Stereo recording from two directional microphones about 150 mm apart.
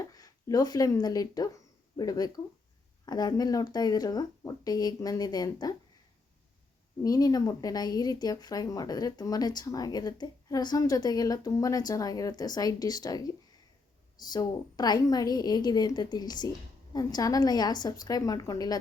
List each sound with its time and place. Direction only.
0.0 s speech: 25° left (ahead or behind)
7.0 s speech: 25° left (ahead or behind)